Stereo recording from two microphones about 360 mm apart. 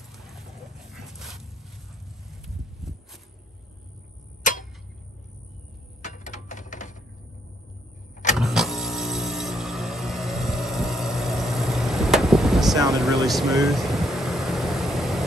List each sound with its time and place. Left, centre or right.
0.9 s a sound: centre
6.0 s typewriter: left
8.4 s music: centre